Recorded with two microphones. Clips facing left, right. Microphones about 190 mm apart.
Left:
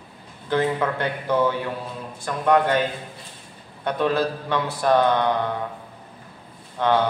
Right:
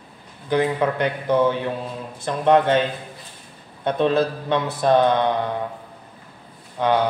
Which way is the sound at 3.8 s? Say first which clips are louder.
Right 3 dB; 25° right (ahead or behind).